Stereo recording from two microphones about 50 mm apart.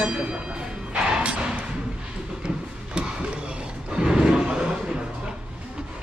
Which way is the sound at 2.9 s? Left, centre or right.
Right.